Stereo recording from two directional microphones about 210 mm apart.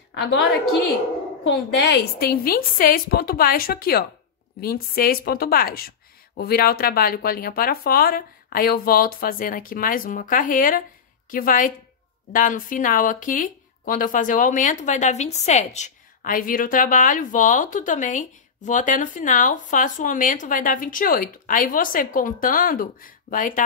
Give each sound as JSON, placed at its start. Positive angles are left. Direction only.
{"t": 0.1, "sound": "a woman's voice", "side_deg": 55}
{"t": 1.4, "sound": "speech", "side_deg": 55}